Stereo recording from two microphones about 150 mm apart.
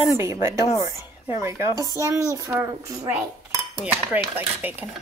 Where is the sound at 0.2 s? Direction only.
20° right (ahead or behind).